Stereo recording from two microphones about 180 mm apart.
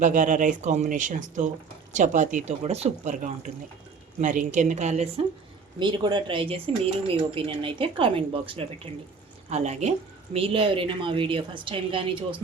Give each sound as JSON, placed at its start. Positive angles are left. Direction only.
{"t": 0.0, "sound": "a woman's voice", "side_deg": -45}
{"t": 5.8, "sound": "a woman's voice", "side_deg": -25}